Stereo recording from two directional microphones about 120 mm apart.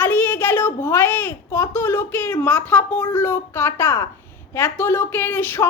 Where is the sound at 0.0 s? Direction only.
15° left (ahead or behind).